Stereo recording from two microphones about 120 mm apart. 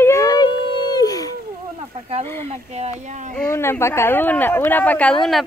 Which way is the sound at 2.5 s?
65° right (ahead or behind).